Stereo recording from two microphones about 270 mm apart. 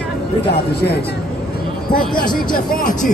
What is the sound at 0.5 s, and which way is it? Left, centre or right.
Speech, left.